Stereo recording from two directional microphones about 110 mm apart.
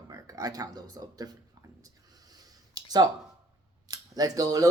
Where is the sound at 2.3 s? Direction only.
35° right (ahead or behind).